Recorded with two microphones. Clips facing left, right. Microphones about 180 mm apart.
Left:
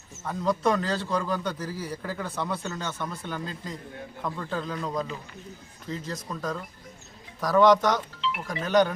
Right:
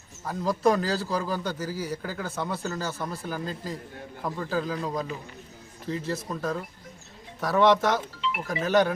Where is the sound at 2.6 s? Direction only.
5° right (ahead or behind).